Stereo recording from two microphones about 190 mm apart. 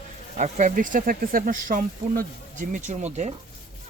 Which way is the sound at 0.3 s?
35° right (ahead or behind).